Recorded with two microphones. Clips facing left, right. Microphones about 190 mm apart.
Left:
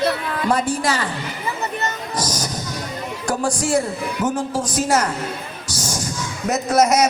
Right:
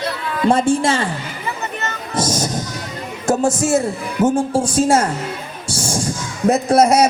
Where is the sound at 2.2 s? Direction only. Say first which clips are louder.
Right 7 dB; 25° right (ahead or behind).